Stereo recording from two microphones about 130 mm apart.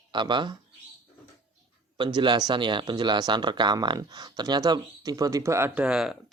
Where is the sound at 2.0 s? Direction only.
35° right (ahead or behind); by 5.8 s 20° right (ahead or behind).